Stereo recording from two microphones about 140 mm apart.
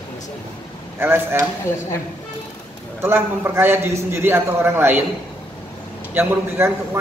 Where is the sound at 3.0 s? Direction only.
15° right (ahead or behind).